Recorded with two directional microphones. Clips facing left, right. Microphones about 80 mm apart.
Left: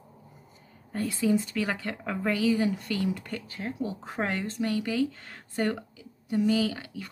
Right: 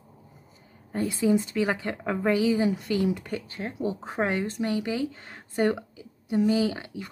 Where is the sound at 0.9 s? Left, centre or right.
Right.